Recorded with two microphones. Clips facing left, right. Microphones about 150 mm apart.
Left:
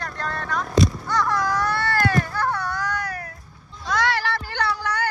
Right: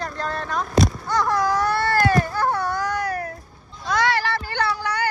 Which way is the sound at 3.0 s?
45° right (ahead or behind).